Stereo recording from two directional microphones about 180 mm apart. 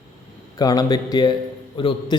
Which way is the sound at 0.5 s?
20° left (ahead or behind).